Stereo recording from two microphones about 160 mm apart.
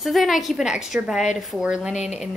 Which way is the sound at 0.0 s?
Centre (ahead or behind).